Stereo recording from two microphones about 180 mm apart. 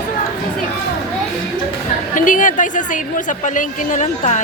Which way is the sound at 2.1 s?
45° left (ahead or behind).